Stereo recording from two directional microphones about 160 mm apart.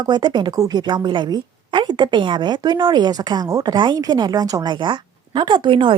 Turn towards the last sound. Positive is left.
turn(degrees=-30)  # may be behind; listen again after turning